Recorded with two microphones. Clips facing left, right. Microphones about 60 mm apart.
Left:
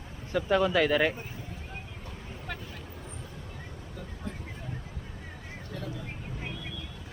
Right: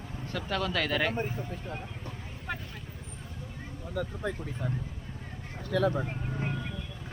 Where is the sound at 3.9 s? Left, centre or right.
Right.